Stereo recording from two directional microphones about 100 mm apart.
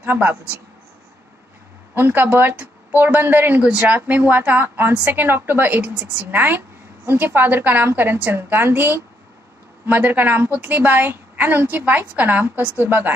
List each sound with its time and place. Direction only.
0.0 s a woman's voice: 20° right (ahead or behind)
2.0 s a woman's voice: 20° right (ahead or behind)